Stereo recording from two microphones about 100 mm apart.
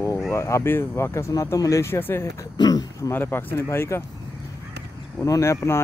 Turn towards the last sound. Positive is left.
turn(degrees=30)  # may be behind; listen again after turning